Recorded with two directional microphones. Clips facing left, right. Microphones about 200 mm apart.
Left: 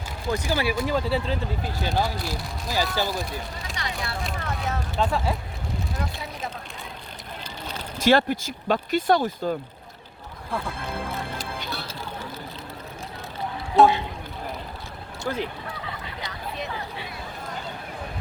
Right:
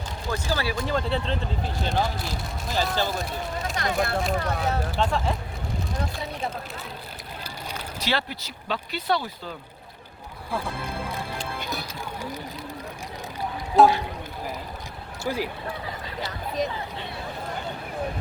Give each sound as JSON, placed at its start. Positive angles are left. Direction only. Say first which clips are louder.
{"t": 0.3, "sound": "speech", "louder": "left 3 dB", "side_deg": 15}
{"t": 3.8, "sound": "speech", "louder": "right 7 dB", "side_deg": -50}
{"t": 4.3, "sound": "speech", "louder": "right 4 dB", "side_deg": -35}
{"t": 4.9, "sound": "speech", "louder": "left 4 dB", "side_deg": 0}
{"t": 7.9, "sound": "speech", "louder": "left 10 dB", "side_deg": 50}
{"t": 11.7, "sound": "music", "louder": "right 1 dB", "side_deg": -15}
{"t": 13.8, "sound": "speech", "louder": "even", "side_deg": 0}
{"t": 15.3, "sound": "speech", "louder": "even", "side_deg": -10}